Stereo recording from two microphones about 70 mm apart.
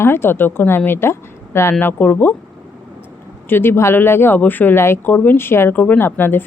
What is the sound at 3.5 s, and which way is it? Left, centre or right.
A woman's voice, left.